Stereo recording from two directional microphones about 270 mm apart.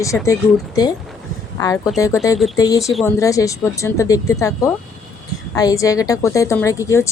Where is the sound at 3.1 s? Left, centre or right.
Centre.